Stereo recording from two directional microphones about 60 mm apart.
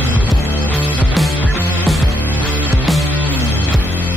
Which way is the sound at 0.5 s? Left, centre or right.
Left.